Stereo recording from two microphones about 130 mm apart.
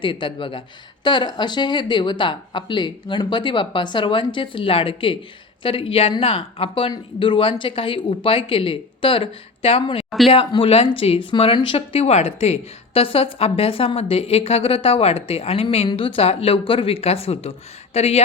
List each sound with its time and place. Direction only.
0.0 s a woman's voice: 40° left (ahead or behind)